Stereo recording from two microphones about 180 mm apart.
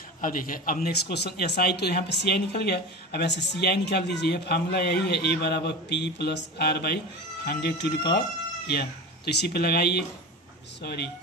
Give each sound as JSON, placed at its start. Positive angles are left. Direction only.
{"t": 0.2, "sound": "a man's voice", "side_deg": 50}